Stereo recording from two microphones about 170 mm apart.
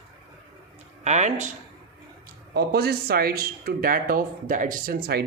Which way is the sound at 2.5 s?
65° right (ahead or behind).